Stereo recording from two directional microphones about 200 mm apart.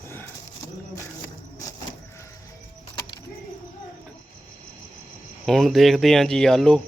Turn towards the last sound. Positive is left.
turn(degrees=5)  # may be behind; listen again after turning